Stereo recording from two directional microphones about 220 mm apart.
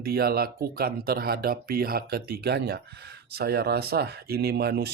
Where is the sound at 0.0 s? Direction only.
45° right (ahead or behind).